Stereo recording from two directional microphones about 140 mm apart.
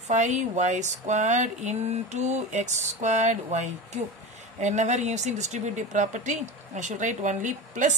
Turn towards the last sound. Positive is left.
turn(degrees=-65)  # may be behind; listen again after turning